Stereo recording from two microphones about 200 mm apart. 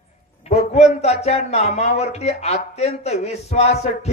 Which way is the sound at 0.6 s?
35° left (ahead or behind).